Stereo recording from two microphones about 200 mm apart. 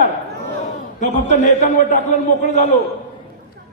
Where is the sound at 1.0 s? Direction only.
35° left (ahead or behind).